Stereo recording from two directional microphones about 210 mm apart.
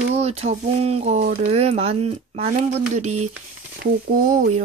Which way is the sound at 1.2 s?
45° right (ahead or behind).